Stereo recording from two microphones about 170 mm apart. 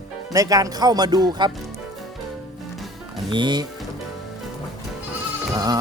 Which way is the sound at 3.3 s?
25° right (ahead or behind).